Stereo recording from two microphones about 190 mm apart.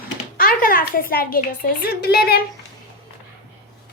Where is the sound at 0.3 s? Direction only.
50° left (ahead or behind).